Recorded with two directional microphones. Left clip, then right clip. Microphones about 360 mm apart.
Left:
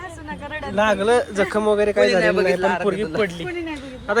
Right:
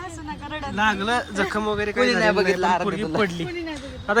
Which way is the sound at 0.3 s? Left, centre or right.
Centre.